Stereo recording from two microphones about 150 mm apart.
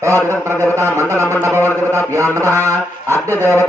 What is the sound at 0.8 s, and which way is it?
Mantra, 20° right (ahead or behind).